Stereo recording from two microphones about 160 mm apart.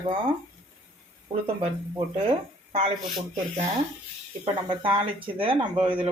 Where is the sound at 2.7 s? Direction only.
40° right (ahead or behind).